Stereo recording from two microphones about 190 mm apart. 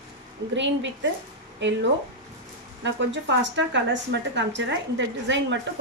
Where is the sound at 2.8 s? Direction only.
70° right (ahead or behind).